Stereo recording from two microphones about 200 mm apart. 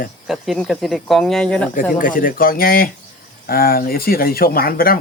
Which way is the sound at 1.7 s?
45° left (ahead or behind).